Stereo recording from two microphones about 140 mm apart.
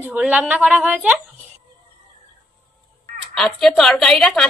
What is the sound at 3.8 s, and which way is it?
Speech, 5° left (ahead or behind).